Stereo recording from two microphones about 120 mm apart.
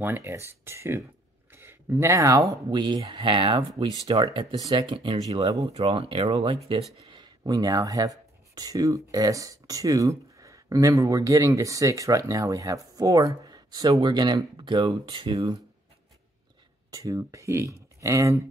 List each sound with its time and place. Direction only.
0.0 s speech: 20° right (ahead or behind); by 6.8 s 55° right (ahead or behind)
7.1 s speech: 40° right (ahead or behind)
15.0 s speech: 45° right (ahead or behind)
16.9 s speech: 30° right (ahead or behind)